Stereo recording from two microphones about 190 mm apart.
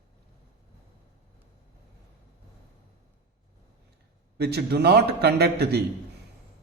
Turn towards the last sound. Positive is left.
turn(degrees=-60)  # may be behind; listen again after turning